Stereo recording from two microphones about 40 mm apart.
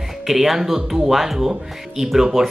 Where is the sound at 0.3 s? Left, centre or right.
Centre.